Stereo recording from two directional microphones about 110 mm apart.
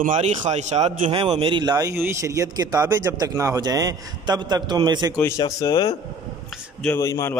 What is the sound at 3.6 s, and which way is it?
A man's voice, 35° right (ahead or behind).